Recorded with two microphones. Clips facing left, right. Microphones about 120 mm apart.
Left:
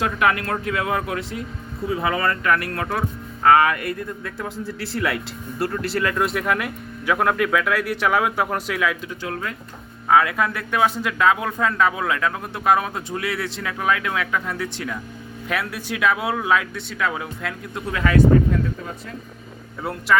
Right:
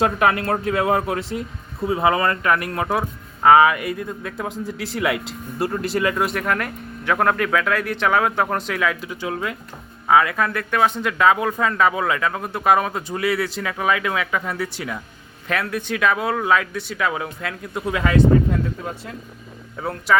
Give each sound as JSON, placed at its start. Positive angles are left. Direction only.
{"t": 0.0, "sound": "speech", "side_deg": -35}
{"t": 6.1, "sound": "speech", "side_deg": 0}
{"t": 9.2, "sound": "speech", "side_deg": -15}
{"t": 10.1, "sound": "speech", "side_deg": 0}
{"t": 15.4, "sound": "speech", "side_deg": 5}
{"t": 17.9, "sound": "speech", "side_deg": -25}
{"t": 19.8, "sound": "speech", "side_deg": 0}